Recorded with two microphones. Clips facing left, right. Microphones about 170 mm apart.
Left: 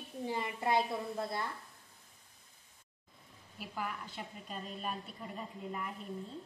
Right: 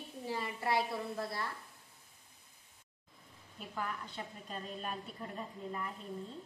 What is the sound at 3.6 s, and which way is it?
Speech, 5° left (ahead or behind).